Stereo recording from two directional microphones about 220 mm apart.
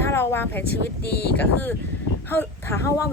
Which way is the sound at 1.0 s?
45° left (ahead or behind).